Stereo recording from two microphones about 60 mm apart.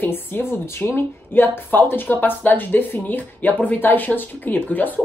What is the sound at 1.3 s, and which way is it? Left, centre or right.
Speech, left.